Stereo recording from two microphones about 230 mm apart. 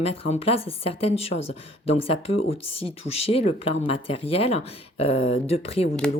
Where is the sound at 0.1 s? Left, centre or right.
Left.